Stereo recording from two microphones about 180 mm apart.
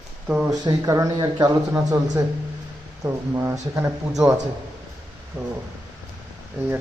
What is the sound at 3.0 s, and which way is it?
Speech, 15° right (ahead or behind).